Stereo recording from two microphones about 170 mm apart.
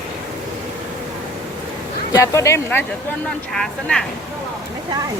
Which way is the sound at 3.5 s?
5° left (ahead or behind).